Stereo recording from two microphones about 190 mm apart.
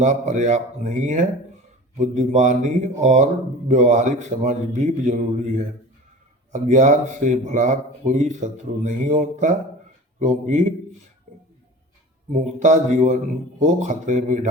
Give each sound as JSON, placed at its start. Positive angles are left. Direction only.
{"t": 0.0, "sound": "speech", "side_deg": -40}
{"t": 12.3, "sound": "speech", "side_deg": -40}